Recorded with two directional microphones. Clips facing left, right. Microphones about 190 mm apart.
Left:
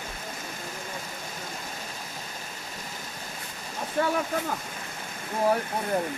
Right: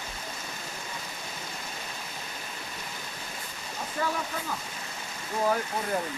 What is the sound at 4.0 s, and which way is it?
Waterfall, 65° left (ahead or behind).